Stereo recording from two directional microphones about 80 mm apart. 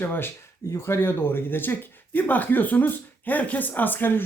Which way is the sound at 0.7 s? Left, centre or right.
Left.